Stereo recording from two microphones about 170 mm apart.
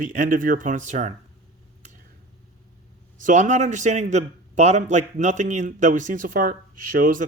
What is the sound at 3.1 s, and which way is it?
A man's voice, 50° right (ahead or behind).